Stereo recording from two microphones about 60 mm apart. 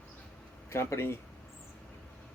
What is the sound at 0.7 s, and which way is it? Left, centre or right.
Speech, left.